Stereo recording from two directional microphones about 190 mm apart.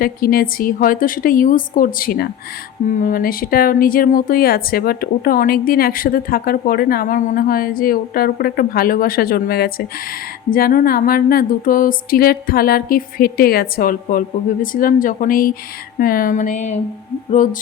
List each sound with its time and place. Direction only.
0.0 s speech: 50° left (ahead or behind)